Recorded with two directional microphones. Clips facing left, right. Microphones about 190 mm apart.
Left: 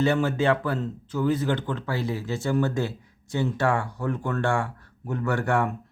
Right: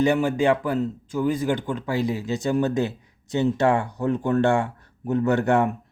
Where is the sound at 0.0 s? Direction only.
15° right (ahead or behind).